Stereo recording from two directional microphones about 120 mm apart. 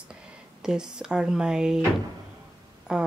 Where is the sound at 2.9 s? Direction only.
5° right (ahead or behind).